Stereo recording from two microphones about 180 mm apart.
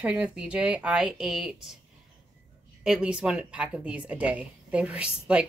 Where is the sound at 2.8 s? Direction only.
5° right (ahead or behind).